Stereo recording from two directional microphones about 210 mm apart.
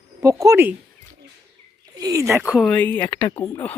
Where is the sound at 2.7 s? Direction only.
5° left (ahead or behind).